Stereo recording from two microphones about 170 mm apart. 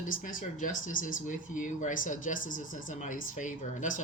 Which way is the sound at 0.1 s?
55° left (ahead or behind).